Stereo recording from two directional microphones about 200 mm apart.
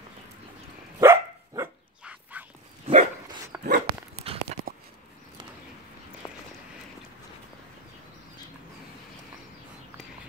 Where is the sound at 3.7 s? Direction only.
30° right (ahead or behind).